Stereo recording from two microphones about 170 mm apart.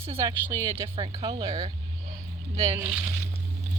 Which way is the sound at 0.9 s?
30° right (ahead or behind).